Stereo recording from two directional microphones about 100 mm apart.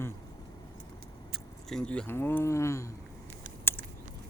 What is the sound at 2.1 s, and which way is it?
Speech, 20° left (ahead or behind).